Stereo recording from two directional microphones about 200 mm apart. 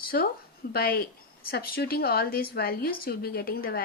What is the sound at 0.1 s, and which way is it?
Speech, 50° left (ahead or behind).